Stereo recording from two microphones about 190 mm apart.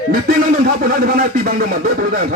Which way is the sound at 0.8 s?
50° right (ahead or behind).